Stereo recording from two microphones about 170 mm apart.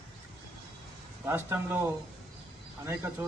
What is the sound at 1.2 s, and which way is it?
A man's voice, 15° right (ahead or behind).